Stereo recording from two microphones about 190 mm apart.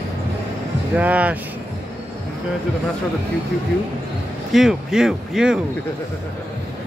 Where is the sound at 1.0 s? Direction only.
5° right (ahead or behind).